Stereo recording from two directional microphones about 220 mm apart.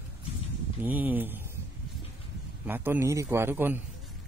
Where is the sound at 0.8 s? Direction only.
5° right (ahead or behind).